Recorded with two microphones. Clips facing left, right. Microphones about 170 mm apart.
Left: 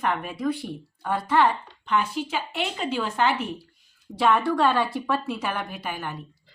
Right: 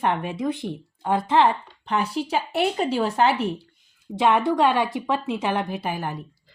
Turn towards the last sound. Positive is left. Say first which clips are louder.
# right 5 dB
turn(degrees=-35)  # may be behind; listen again after turning